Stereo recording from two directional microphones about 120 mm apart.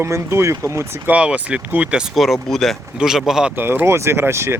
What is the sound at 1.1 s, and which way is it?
Speech, 10° right (ahead or behind).